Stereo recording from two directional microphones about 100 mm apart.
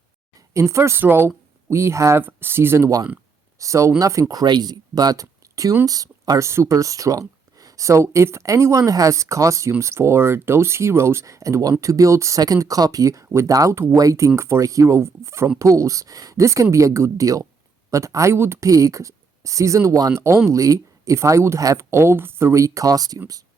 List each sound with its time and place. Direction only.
0.5 s speech: 30° right (ahead or behind)